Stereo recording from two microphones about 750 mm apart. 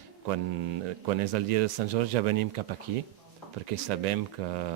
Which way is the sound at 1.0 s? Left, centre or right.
Right.